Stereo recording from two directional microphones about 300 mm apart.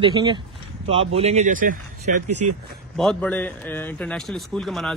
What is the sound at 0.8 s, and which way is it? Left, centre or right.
Speech, centre.